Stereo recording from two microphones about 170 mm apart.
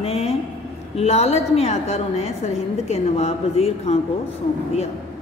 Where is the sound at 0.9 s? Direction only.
40° left (ahead or behind).